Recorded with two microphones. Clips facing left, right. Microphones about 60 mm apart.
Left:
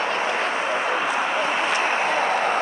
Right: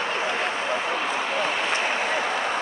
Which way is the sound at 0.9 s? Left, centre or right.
Left.